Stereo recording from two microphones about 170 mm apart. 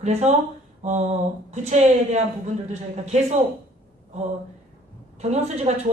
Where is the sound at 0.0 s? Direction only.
40° right (ahead or behind).